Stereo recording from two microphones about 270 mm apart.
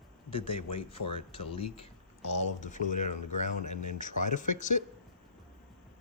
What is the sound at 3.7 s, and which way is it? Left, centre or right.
Speech, left.